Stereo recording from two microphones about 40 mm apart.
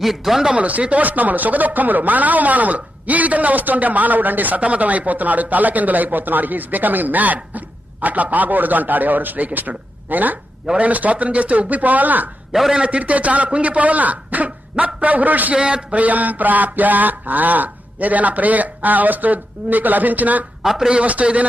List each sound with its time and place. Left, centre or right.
0.0 s speech: centre
0.5 s a man's voice: right
12.7 s a man's voice: right
15.5 s a man's voice: right
15.9 s speech: right
20.6 s a man's voice: centre
20.9 s a man's voice: right